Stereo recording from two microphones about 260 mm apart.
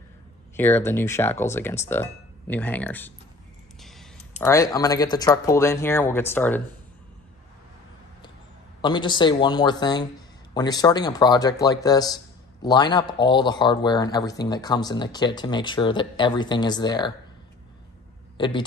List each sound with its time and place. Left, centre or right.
0.6 s speech: centre
4.4 s speech: centre
8.8 s speech: centre